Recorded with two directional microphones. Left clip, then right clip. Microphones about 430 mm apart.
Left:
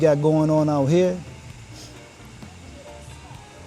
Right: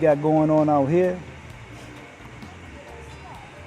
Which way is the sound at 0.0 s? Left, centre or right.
Centre.